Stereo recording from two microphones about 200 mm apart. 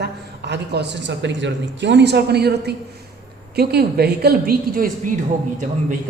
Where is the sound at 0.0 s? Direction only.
55° right (ahead or behind).